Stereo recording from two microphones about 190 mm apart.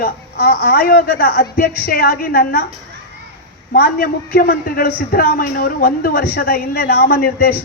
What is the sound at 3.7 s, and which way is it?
A man's voice, 50° left (ahead or behind).